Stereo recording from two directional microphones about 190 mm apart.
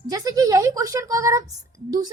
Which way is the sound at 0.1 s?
20° right (ahead or behind).